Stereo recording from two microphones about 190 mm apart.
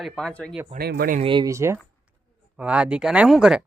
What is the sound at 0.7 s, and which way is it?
Speech, 55° right (ahead or behind).